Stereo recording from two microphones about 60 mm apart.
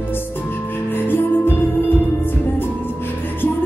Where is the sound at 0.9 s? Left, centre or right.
Left.